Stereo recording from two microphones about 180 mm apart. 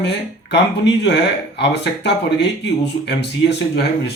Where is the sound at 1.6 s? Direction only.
70° left (ahead or behind).